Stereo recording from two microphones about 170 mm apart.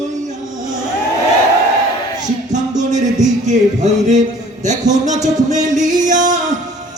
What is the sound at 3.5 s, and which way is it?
Music, 45° right (ahead or behind).